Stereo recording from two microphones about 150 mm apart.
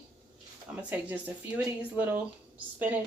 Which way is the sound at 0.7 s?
10° right (ahead or behind).